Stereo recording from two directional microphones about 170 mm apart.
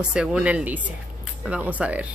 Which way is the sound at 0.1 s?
5° right (ahead or behind).